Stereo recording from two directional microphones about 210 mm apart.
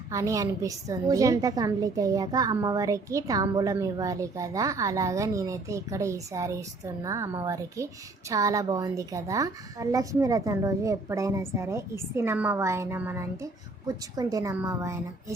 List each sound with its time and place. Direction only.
0.1 s a woman's voice: 15° right (ahead or behind)